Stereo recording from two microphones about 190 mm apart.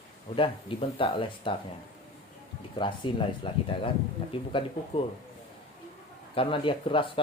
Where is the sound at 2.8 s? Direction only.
25° left (ahead or behind).